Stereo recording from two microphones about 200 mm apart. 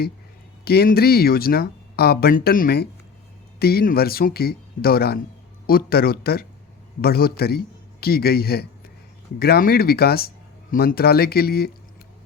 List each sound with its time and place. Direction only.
0.6 s speech: 50° left (ahead or behind)